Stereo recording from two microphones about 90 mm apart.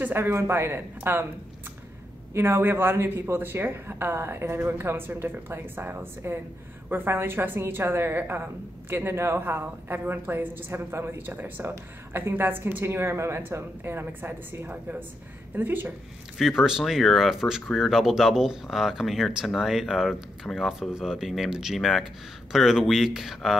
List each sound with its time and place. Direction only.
0.0 s a woman's voice: 25° right (ahead or behind)
2.3 s a woman's voice: 25° right (ahead or behind)
16.3 s speech: 5° right (ahead or behind)